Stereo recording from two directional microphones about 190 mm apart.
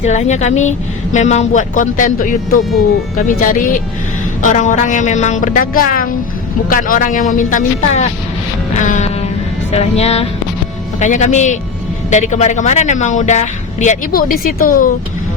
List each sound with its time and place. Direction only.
0.0 s speech: 40° left (ahead or behind)
8.7 s music: 40° left (ahead or behind)
9.7 s speech: 35° left (ahead or behind)